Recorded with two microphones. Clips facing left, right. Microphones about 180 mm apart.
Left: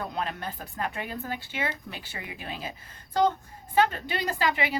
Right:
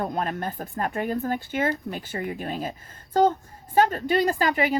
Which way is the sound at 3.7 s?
40° right (ahead or behind).